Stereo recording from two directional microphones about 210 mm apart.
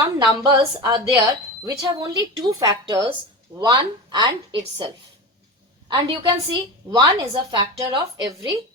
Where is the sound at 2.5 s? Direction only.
15° right (ahead or behind).